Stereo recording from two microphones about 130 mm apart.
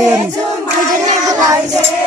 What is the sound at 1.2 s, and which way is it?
Child singing, 30° right (ahead or behind).